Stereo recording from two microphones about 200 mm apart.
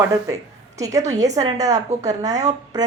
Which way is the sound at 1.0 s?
35° right (ahead or behind).